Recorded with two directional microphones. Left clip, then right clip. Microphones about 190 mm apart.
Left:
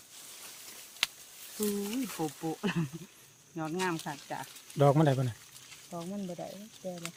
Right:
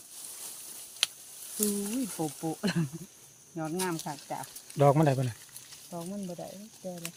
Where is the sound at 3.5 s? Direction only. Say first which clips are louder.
Even; 35° right (ahead or behind).